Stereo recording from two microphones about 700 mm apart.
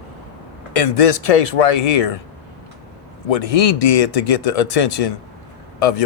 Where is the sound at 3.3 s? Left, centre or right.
Left.